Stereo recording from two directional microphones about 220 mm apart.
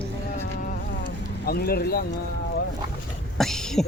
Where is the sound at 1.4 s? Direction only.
45° left (ahead or behind).